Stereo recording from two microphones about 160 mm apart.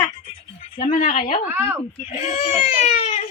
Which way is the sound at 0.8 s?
55° left (ahead or behind).